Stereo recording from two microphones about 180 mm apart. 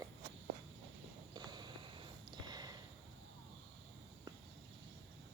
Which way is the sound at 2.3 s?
25° right (ahead or behind).